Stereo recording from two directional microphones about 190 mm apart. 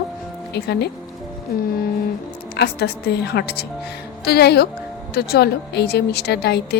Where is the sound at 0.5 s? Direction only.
60° left (ahead or behind).